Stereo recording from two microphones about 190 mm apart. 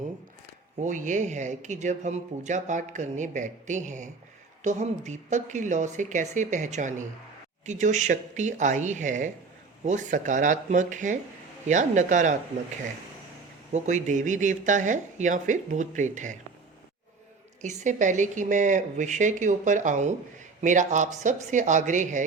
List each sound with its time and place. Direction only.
0.8 s speech: 40° right (ahead or behind)
13.7 s speech: 40° right (ahead or behind)
17.6 s speech: 40° right (ahead or behind)